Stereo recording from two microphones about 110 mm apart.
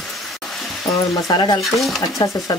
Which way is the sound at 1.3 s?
40° left (ahead or behind).